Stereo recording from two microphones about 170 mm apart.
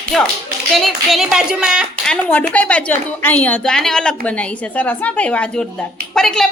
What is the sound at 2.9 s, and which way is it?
A woman's voice, 10° left (ahead or behind).